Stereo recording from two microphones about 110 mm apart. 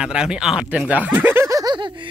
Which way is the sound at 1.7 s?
45° right (ahead or behind).